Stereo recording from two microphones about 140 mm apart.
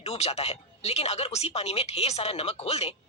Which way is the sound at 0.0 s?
45° left (ahead or behind).